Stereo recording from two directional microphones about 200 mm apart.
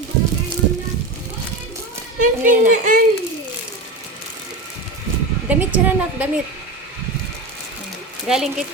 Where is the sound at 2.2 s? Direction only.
40° right (ahead or behind).